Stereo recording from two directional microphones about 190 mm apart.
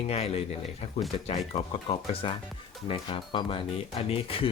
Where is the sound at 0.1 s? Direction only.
30° left (ahead or behind).